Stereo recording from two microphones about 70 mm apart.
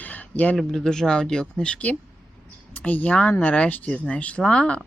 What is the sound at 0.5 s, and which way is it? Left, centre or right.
Speech, centre.